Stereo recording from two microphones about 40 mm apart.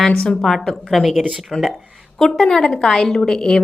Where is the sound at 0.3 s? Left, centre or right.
Centre.